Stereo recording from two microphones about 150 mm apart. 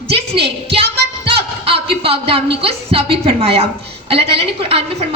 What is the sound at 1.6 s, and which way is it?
A woman's voice, 40° right (ahead or behind).